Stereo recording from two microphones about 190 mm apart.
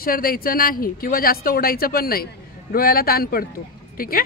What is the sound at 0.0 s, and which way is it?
A woman's voice, 50° left (ahead or behind).